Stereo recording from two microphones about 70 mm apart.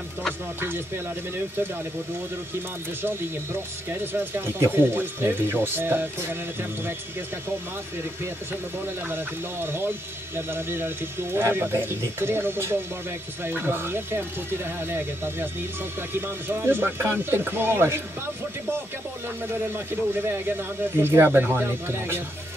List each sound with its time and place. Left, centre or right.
0.6 s speech: right
3.9 s speech: right
8.8 s speech: right
19.5 s speech: right